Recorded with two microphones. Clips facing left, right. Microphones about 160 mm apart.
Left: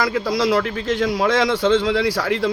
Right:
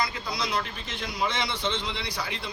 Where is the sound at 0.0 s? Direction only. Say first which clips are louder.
Left 11 dB; 90° left.